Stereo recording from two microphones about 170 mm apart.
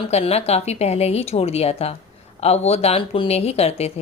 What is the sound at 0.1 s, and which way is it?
Speech, 35° left (ahead or behind).